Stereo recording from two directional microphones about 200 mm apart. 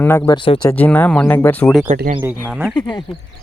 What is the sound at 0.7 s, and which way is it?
Speech, 10° left (ahead or behind).